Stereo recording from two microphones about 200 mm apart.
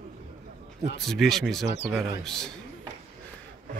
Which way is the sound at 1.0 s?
Centre (ahead or behind).